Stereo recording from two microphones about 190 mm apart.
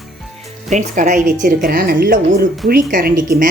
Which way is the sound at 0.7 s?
40° right (ahead or behind).